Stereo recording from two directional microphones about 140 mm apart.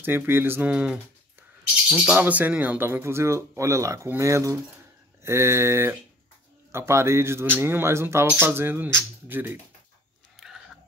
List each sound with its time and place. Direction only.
0.0 s speech: 15° right (ahead or behind)